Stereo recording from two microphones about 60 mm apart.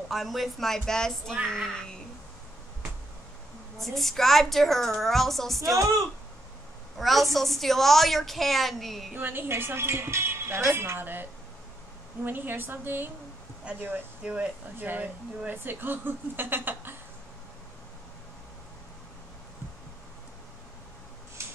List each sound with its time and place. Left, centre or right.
0.1 s a woman's voice: centre
3.7 s a woman's voice: centre
7.0 s a woman's voice: centre
9.1 s speech: right
14.2 s speech: right
14.8 s speech: right